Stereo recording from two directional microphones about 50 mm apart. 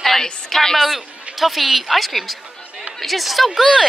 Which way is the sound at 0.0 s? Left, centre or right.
Centre.